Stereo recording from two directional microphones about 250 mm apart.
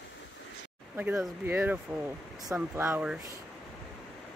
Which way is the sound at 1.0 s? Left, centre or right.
Centre.